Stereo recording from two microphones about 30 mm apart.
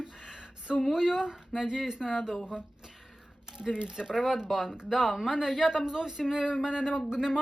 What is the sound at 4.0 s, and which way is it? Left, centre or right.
Speech, centre.